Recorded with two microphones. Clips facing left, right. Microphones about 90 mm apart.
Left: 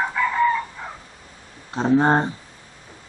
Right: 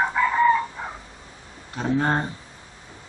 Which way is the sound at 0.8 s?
20° right (ahead or behind).